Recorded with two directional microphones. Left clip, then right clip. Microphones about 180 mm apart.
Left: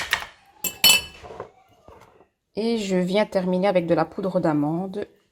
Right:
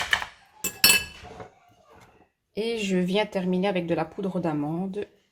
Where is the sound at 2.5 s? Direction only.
25° left (ahead or behind).